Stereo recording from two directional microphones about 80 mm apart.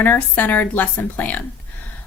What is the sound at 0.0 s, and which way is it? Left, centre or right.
Speech, left.